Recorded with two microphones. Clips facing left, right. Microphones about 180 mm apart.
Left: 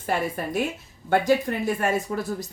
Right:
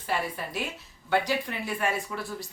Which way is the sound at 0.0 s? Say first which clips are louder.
Left 5 dB; 50° left (ahead or behind).